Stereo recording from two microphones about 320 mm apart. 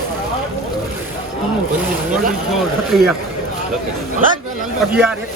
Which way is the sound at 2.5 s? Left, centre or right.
Centre.